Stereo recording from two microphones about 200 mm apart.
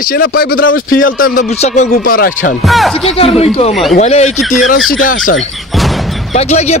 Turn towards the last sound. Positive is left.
turn(degrees=35)  # may be behind; listen again after turning